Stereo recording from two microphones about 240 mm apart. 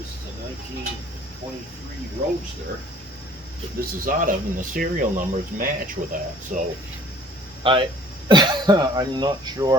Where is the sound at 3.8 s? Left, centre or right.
Right.